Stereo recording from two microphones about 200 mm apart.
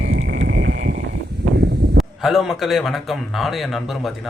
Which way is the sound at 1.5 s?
55° right (ahead or behind).